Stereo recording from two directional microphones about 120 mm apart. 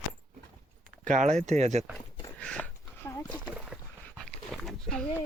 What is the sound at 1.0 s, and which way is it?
Speech, 85° right.